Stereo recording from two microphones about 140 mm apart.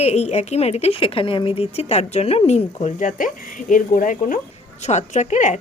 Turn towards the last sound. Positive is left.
turn(degrees=60)  # may be behind; listen again after turning